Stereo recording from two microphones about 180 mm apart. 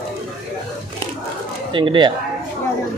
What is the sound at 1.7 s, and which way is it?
Speech, 25° right (ahead or behind).